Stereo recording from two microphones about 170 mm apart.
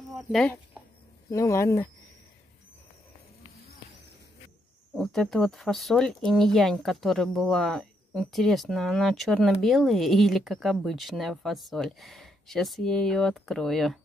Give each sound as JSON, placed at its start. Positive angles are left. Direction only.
{"t": 0.3, "sound": "speech", "side_deg": 5}
{"t": 1.3, "sound": "speech", "side_deg": 15}
{"t": 4.9, "sound": "speech", "side_deg": 0}